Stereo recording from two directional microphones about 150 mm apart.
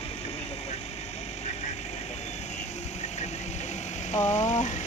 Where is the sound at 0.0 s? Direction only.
40° left (ahead or behind).